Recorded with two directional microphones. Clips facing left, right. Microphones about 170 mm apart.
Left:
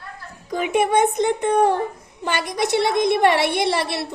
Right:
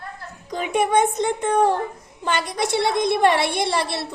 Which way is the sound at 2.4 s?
50° left (ahead or behind).